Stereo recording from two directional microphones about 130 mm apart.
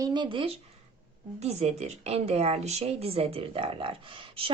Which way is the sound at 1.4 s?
55° right (ahead or behind).